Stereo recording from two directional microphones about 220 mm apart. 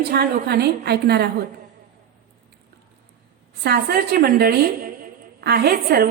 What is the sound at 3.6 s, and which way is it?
A woman's voice, 45° right (ahead or behind).